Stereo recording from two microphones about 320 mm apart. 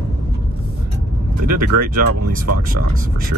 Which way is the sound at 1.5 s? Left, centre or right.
Right.